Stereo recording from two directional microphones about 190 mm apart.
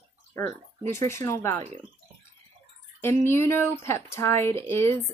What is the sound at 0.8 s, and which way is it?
Speech, 15° left (ahead or behind).